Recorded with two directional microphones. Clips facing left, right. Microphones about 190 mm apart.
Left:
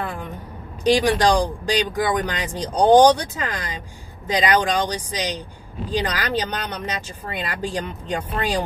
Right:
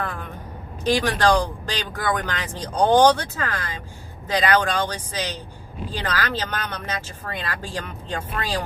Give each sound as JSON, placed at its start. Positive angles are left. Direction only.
{"t": 1.0, "sound": "speech", "side_deg": 15}